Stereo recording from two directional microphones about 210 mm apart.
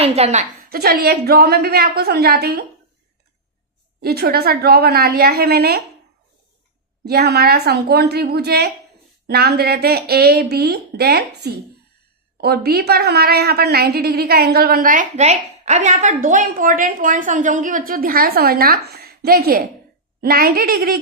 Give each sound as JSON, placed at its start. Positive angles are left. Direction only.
{"t": 0.0, "sound": "a woman's voice", "side_deg": -30}
{"t": 4.0, "sound": "a woman's voice", "side_deg": -50}
{"t": 7.0, "sound": "a woman's voice", "side_deg": -50}